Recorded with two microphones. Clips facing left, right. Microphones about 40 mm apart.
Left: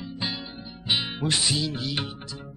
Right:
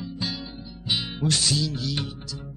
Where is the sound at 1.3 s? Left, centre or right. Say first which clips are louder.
Right 2 dB; left.